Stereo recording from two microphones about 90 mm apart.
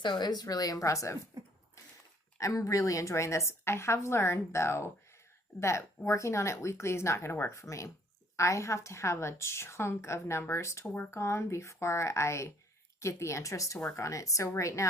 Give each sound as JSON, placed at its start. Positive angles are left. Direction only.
{"t": 0.0, "sound": "a woman's voice", "side_deg": 50}
{"t": 2.4, "sound": "a woman's voice", "side_deg": 35}